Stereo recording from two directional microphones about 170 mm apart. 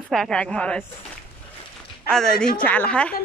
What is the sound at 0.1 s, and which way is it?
Speech, 5° left (ahead or behind).